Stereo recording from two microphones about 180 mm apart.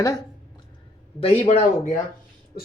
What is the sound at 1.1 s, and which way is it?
Speech, 30° left (ahead or behind).